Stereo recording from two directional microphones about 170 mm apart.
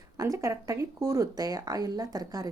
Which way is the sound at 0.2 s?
20° right (ahead or behind).